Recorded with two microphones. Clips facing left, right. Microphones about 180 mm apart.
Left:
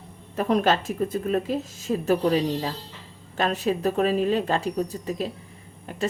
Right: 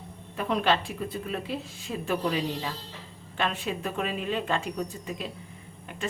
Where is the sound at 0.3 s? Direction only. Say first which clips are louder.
Left 4 dB; 40° left (ahead or behind).